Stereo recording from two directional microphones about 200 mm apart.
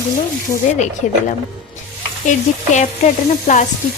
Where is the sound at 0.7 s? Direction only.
35° left (ahead or behind).